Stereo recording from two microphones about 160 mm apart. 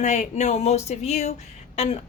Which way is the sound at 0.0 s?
45° left (ahead or behind).